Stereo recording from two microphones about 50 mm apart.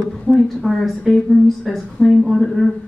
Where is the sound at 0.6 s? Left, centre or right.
Centre.